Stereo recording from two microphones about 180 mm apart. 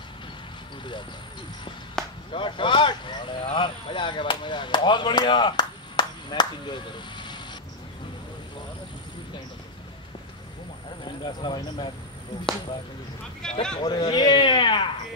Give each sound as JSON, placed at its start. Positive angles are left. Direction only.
{"t": 2.0, "sound": "chop", "side_deg": 5}
{"t": 2.3, "sound": "speech", "side_deg": 30}
{"t": 11.1, "sound": "speech", "side_deg": 25}
{"t": 13.4, "sound": "speech", "side_deg": 5}
{"t": 13.7, "sound": "speech", "side_deg": 25}